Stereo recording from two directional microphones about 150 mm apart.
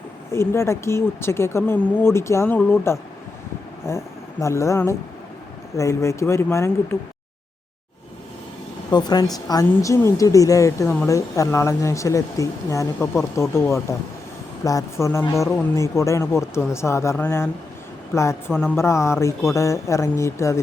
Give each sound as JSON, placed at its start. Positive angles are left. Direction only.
{"t": 0.3, "sound": "a woman's voice", "side_deg": 15}
{"t": 8.9, "sound": "a woman's voice", "side_deg": 30}